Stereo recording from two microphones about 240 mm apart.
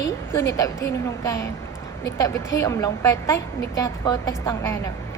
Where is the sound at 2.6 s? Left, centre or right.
Centre.